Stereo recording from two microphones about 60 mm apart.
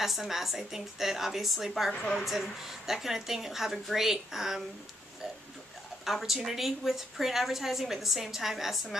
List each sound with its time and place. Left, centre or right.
0.0 s a woman's voice: centre
1.9 s a woman's voice: centre
2.1 s a woman's voice: centre
6.0 s a woman's voice: centre